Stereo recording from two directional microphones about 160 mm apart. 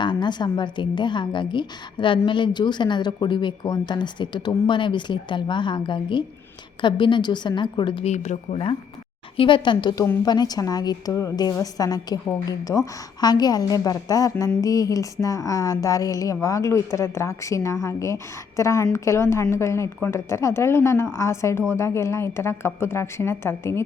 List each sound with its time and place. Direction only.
0.0 s a woman's voice: 30° left (ahead or behind)
8.1 s speech: 45° left (ahead or behind)
9.4 s a woman's voice: 30° left (ahead or behind)